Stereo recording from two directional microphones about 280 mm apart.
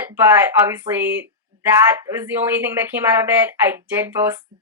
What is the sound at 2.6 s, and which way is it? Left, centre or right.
Speech, centre.